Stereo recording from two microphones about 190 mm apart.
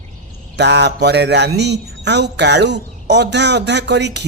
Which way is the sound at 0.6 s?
65° right (ahead or behind).